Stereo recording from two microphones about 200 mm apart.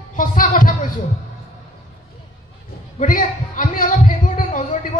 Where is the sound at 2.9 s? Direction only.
40° left (ahead or behind).